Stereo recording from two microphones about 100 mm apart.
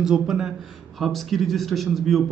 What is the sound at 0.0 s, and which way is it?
A man's voice, 5° right (ahead or behind).